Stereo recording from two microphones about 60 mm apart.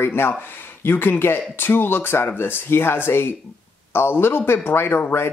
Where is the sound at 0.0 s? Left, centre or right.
Left.